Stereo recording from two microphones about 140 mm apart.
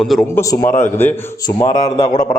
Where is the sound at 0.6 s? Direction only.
60° left (ahead or behind).